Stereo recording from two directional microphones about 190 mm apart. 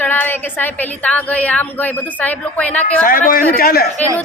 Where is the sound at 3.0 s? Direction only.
45° left (ahead or behind).